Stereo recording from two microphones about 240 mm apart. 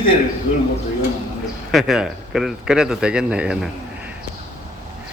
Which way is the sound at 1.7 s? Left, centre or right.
Centre.